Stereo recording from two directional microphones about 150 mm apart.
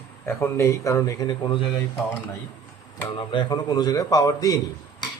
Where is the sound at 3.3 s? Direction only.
30° left (ahead or behind).